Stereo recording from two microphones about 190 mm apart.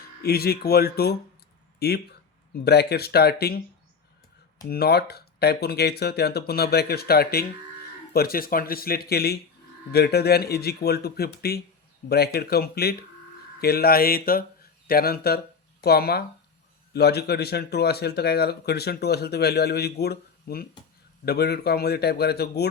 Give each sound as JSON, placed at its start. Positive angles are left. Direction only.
{"t": 0.0, "sound": "speech", "side_deg": 55}
{"t": 4.7, "sound": "speech", "side_deg": 55}